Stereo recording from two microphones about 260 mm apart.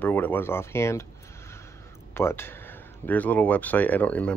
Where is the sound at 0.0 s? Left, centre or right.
Centre.